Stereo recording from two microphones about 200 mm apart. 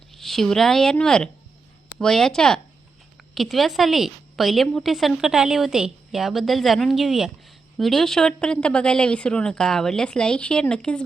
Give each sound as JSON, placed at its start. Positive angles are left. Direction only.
{"t": 0.1, "sound": "a woman's voice", "side_deg": 0}